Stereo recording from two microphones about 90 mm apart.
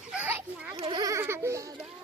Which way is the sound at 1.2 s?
30° right (ahead or behind).